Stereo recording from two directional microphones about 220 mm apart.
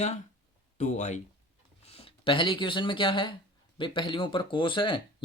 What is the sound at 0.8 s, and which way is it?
Speech, 35° left (ahead or behind).